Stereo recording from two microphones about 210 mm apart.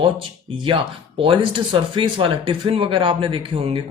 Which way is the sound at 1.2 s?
25° right (ahead or behind).